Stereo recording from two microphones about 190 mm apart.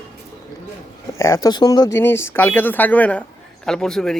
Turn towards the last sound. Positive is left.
turn(degrees=0)  # may be behind; listen again after turning